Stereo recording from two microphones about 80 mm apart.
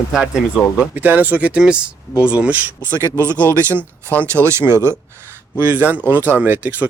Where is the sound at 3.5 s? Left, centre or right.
Right.